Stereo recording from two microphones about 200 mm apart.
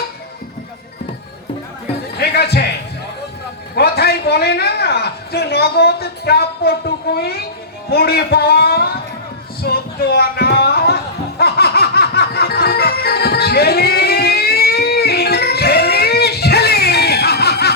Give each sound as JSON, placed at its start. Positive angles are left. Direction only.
{"t": 2.1, "sound": "a man's voice", "side_deg": 55}
{"t": 3.8, "sound": "a man's voice", "side_deg": 50}
{"t": 9.6, "sound": "a sound", "side_deg": 50}
{"t": 11.3, "sound": "music", "side_deg": 50}